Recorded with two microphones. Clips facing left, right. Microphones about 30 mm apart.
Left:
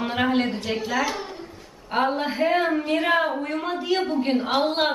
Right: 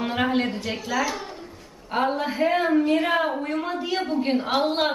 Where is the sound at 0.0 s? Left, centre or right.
Centre.